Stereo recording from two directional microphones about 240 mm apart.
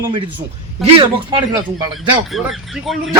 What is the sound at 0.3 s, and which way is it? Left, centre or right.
Speech, centre.